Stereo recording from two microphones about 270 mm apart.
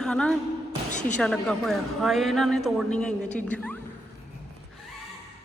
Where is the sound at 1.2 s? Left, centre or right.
Centre.